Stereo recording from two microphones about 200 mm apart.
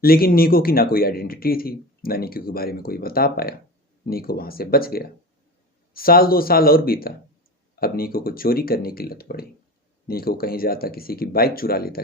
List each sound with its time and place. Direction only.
0.0 s speech: 50° left (ahead or behind)